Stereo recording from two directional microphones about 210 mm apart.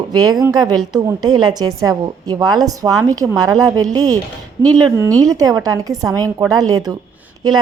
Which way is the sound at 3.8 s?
75° right (ahead or behind).